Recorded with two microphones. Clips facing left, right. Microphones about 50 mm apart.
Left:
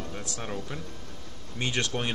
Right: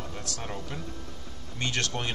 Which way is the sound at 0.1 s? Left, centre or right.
Centre.